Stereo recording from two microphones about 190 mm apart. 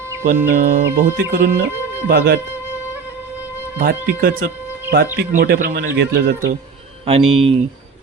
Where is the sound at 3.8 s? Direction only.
50° right (ahead or behind).